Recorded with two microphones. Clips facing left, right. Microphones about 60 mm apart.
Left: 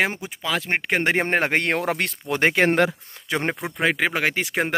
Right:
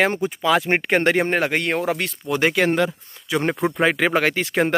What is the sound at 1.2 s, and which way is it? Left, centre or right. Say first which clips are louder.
Speech: right 1 dB; left.